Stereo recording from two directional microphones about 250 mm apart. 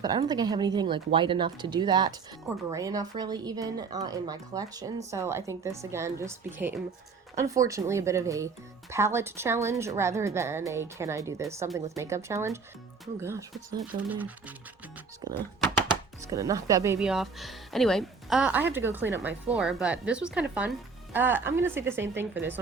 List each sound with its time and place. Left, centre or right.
0.0 s speech: centre
16.2 s speech: centre